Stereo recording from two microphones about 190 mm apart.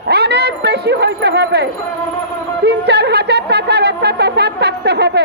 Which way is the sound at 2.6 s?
60° right (ahead or behind).